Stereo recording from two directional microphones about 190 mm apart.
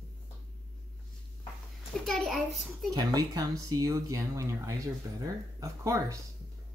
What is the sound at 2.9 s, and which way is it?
Speech, 20° right (ahead or behind).